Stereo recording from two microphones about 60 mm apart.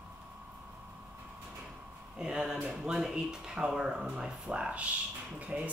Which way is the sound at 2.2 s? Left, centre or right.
Centre.